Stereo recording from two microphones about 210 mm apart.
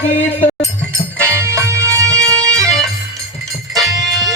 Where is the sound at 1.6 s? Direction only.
15° right (ahead or behind).